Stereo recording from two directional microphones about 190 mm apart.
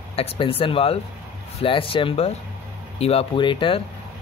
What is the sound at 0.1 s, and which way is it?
Speech, 30° left (ahead or behind).